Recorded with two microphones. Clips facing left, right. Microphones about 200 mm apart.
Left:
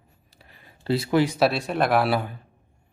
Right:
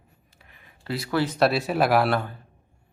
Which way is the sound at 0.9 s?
25° left (ahead or behind).